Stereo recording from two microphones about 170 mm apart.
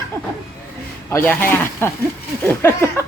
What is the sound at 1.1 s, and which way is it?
Speech, 10° left (ahead or behind).